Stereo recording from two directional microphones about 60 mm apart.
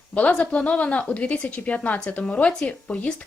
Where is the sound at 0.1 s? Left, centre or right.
Left.